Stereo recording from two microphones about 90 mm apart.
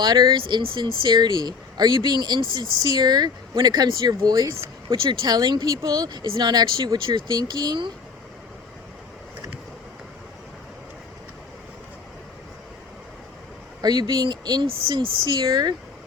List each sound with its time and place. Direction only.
0.0 s speech: 55° right (ahead or behind)
13.8 s speech: 50° right (ahead or behind)
14.8 s speech: 65° right (ahead or behind)